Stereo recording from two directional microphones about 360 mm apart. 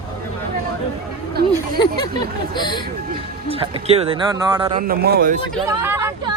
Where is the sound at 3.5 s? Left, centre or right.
Centre.